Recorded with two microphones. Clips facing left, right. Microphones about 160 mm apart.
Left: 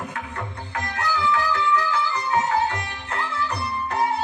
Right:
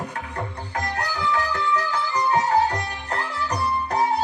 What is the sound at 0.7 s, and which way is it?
Music, 35° right (ahead or behind).